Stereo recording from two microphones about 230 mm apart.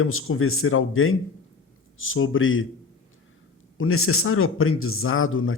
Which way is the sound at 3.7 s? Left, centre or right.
Left.